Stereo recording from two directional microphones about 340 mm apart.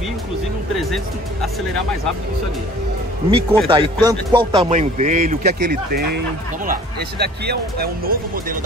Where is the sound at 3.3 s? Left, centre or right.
Centre.